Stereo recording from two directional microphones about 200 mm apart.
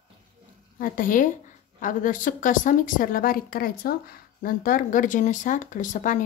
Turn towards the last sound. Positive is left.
turn(degrees=40)  # may be behind; listen again after turning